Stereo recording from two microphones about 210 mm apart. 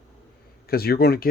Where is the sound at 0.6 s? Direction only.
45° left (ahead or behind).